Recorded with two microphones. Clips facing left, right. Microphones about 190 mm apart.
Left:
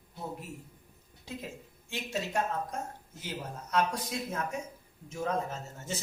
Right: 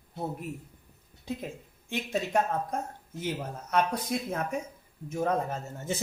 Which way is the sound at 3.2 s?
60° right (ahead or behind).